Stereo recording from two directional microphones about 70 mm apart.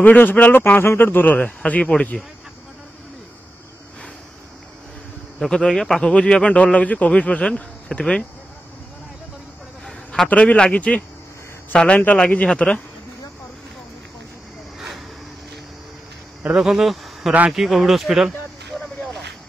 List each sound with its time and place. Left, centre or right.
0.0 s a man's voice: left
5.4 s a man's voice: centre
10.2 s a man's voice: centre
16.4 s speech: centre